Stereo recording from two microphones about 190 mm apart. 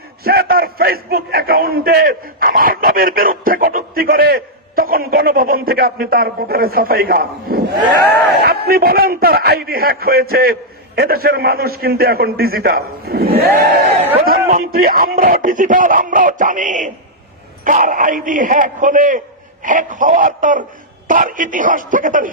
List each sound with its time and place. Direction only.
0.2 s a man's voice: 55° right (ahead or behind)
13.4 s crowd: 55° right (ahead or behind)
14.2 s a man's voice: 50° right (ahead or behind)